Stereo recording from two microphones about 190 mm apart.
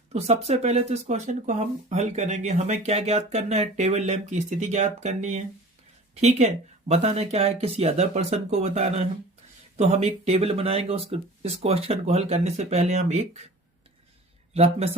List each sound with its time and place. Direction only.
0.1 s speech: 35° right (ahead or behind)
14.5 s speech: 35° right (ahead or behind)